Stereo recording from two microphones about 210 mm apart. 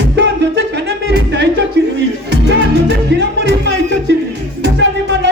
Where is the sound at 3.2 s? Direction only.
55° right (ahead or behind).